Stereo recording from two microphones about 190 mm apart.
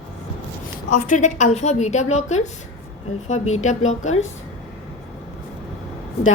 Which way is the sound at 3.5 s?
40° left (ahead or behind).